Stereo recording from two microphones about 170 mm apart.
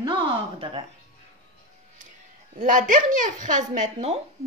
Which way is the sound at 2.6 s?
50° right (ahead or behind).